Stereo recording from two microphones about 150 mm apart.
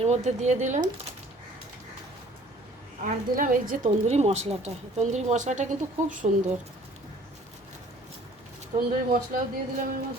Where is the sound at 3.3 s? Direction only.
65° right (ahead or behind).